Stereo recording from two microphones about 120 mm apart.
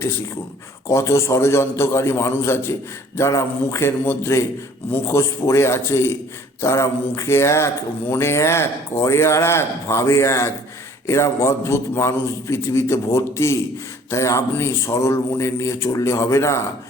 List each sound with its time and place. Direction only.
0.9 s a man's voice: 25° left (ahead or behind)